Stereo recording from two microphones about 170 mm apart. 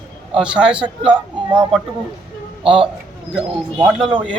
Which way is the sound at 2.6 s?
30° right (ahead or behind).